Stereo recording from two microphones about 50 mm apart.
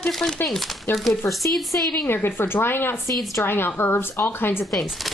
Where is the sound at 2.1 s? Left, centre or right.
Left.